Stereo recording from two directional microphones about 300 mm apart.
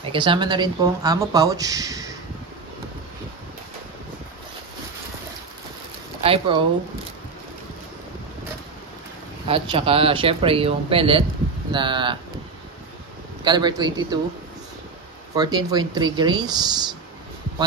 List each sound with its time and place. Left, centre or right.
0.1 s speech: centre
6.2 s speech: centre
9.5 s speech: centre
13.4 s speech: centre
15.3 s speech: centre